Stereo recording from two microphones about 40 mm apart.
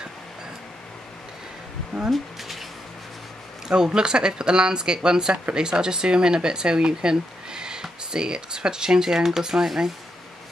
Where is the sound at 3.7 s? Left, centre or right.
Centre.